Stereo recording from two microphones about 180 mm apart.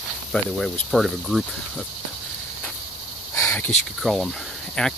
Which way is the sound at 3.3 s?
15° left (ahead or behind).